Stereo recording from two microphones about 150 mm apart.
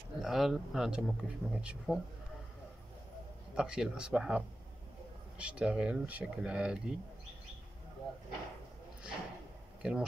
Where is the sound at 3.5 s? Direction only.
5° right (ahead or behind).